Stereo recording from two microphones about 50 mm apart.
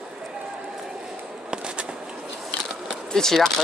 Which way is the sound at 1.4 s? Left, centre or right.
Centre.